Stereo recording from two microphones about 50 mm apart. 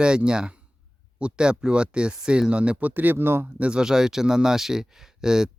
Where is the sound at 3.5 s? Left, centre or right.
Right.